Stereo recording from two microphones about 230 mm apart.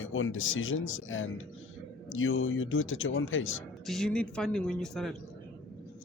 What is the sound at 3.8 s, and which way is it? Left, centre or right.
Speech, centre.